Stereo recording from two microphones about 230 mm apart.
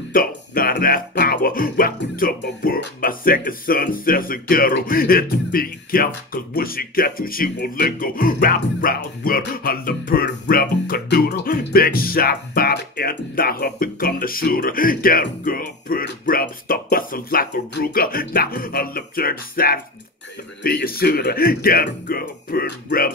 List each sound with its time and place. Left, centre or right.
0.1 s speech: left